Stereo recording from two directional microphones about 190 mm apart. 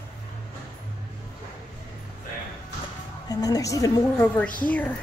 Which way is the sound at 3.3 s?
20° left (ahead or behind).